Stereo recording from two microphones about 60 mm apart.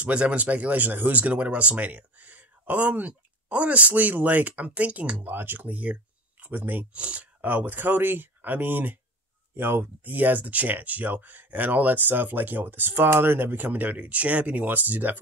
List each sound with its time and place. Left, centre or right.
0.0 s speech: right